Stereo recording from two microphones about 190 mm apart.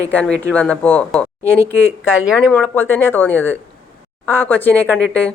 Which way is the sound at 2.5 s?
10° left (ahead or behind).